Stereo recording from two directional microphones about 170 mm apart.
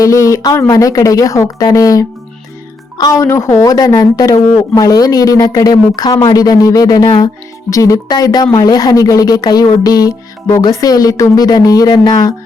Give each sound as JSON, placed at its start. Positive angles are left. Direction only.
{"t": 0.0, "sound": "speech", "side_deg": 20}